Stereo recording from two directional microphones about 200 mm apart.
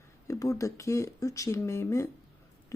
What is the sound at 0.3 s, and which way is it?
Speech, 15° left (ahead or behind).